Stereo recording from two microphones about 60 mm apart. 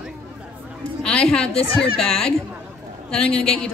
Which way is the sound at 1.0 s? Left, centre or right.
Centre.